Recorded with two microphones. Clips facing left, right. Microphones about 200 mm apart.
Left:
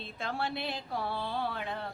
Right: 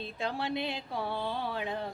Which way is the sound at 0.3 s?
15° right (ahead or behind).